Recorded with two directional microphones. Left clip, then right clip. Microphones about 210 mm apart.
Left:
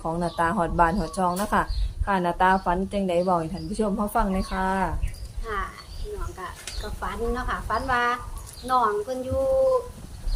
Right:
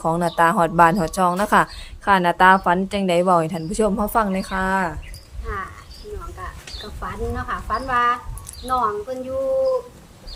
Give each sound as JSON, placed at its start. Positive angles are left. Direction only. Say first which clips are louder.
{"t": 0.0, "sound": "a woman's voice", "louder": "right 8 dB", "side_deg": -45}
{"t": 5.5, "sound": "a sound", "louder": "right 1 dB", "side_deg": -5}
{"t": 7.0, "sound": "a woman's voice", "louder": "even", "side_deg": -5}